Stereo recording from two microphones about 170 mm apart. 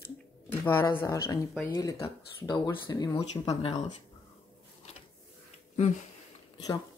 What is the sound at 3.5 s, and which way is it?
Speech, 35° left (ahead or behind).